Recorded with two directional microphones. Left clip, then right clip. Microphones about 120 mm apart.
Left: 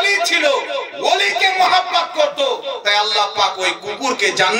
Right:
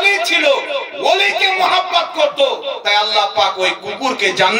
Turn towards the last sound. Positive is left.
turn(degrees=40)  # may be behind; listen again after turning